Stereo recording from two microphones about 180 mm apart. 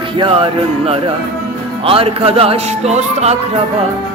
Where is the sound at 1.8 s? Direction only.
30° right (ahead or behind).